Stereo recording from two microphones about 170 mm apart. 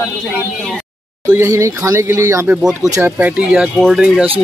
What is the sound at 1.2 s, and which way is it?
Speech, 15° right (ahead or behind).